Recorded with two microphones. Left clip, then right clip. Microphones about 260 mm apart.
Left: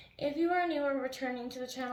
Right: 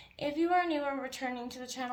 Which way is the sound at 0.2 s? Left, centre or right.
Right.